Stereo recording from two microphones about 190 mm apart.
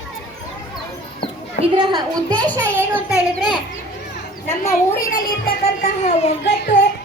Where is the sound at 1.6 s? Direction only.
25° right (ahead or behind).